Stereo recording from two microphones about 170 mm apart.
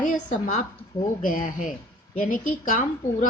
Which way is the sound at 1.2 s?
55° left (ahead or behind).